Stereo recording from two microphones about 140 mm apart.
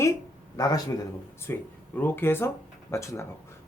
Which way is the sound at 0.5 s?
25° left (ahead or behind).